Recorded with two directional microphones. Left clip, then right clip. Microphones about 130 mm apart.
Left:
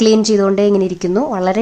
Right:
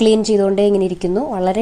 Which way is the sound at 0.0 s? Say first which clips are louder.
Left 1 dB; 10° right (ahead or behind).